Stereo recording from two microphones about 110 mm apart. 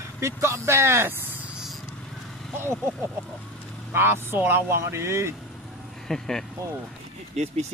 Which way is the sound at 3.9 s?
20° right (ahead or behind).